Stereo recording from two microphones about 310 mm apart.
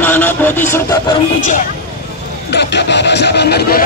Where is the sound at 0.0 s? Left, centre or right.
Centre.